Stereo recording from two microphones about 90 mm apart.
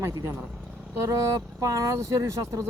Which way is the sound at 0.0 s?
40° right (ahead or behind).